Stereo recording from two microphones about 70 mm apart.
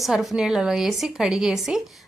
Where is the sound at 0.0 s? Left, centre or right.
Centre.